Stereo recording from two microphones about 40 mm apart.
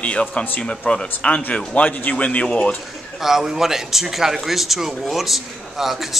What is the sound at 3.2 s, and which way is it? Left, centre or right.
Speech, centre.